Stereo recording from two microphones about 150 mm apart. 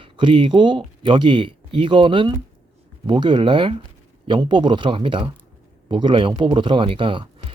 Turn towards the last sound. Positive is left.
turn(degrees=-35)  # may be behind; listen again after turning